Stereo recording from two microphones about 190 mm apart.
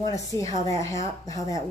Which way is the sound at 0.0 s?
15° left (ahead or behind).